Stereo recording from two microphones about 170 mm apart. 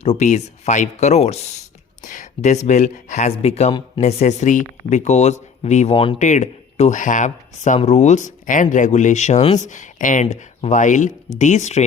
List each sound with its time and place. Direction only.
0.0 s speech: 40° left (ahead or behind)
4.0 s speech: 40° left (ahead or behind)
6.1 s speech: 45° left (ahead or behind)